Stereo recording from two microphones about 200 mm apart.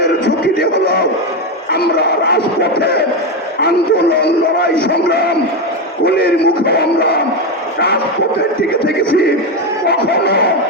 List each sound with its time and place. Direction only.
0.6 s a sound: 50° left (ahead or behind)
1.7 s speech: 55° left (ahead or behind)
8.8 s speech: 55° left (ahead or behind)